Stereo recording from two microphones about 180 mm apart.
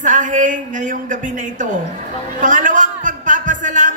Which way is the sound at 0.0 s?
45° right (ahead or behind).